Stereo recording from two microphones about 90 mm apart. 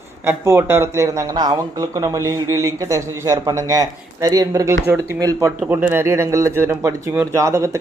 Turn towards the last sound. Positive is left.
turn(degrees=-35)  # may be behind; listen again after turning